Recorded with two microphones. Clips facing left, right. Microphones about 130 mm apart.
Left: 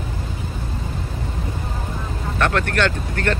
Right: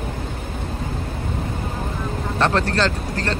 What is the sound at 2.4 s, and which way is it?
Vehicle, 30° right (ahead or behind).